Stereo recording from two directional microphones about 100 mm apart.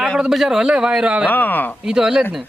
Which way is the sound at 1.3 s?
20° left (ahead or behind).